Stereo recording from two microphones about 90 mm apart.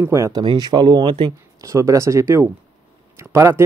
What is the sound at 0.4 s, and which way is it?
Speech, 55° right (ahead or behind).